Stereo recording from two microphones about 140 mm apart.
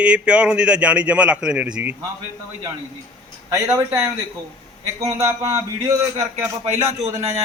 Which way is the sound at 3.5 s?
20° right (ahead or behind).